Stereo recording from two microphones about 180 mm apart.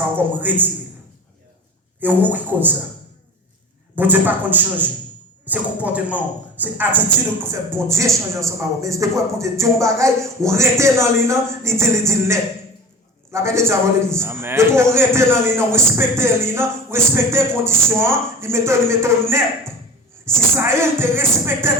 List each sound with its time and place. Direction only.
0.2 s speech: 10° right (ahead or behind)
2.0 s speech: 10° right (ahead or behind)
3.9 s speech: 10° right (ahead or behind)
20.2 s speech: 15° right (ahead or behind)